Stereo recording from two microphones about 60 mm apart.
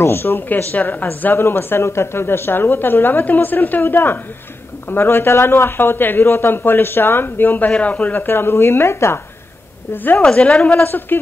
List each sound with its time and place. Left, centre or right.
0.0 s speech: left
0.5 s speech: left
1.0 s speech: left
10.2 s speech: centre
10.8 s speech: left